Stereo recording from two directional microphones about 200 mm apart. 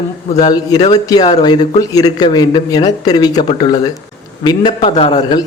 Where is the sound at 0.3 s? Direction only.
20° left (ahead or behind).